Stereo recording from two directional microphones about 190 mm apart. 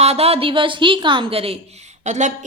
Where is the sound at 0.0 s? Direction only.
35° right (ahead or behind).